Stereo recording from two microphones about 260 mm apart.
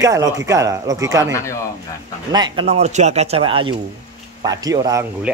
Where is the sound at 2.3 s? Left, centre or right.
Centre.